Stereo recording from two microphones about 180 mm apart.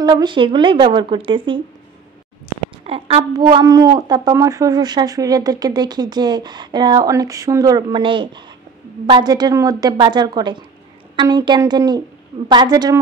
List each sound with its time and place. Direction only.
0.0 s a woman's voice: 25° right (ahead or behind)
2.8 s a woman's voice: 35° right (ahead or behind)